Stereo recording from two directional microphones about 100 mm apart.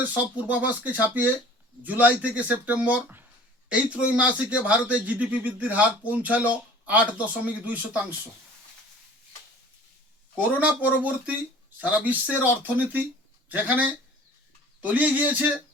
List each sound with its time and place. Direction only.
0.1 s speech: 15° right (ahead or behind)
10.3 s speech: 15° right (ahead or behind)